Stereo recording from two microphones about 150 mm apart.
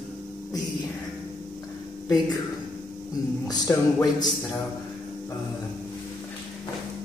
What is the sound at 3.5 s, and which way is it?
Speech, 20° left (ahead or behind).